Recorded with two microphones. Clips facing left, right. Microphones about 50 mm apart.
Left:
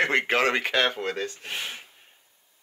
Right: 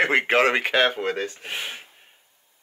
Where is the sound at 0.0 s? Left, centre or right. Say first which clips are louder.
Right 3 dB; centre.